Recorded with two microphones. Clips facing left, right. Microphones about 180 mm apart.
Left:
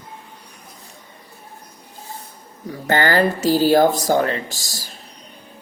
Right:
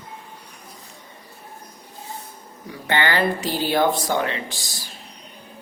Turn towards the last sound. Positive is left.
turn(degrees=40)  # may be behind; listen again after turning